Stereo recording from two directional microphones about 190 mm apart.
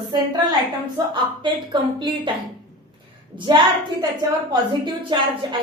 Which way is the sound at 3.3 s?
25° right (ahead or behind).